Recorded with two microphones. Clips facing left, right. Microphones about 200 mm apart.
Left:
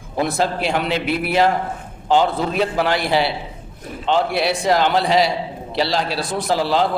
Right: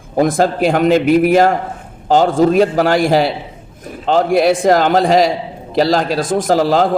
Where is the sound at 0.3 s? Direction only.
45° right (ahead or behind).